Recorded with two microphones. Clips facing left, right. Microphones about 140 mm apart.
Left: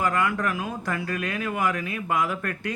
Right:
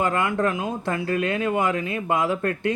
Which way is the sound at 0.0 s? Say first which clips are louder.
Right 3 dB; 25° right (ahead or behind).